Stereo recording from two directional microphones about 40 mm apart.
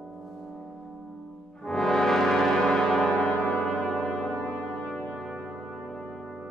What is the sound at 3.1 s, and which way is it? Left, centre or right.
Brass instrument, left.